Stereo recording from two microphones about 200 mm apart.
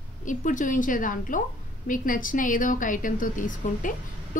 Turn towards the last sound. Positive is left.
turn(degrees=40)  # may be behind; listen again after turning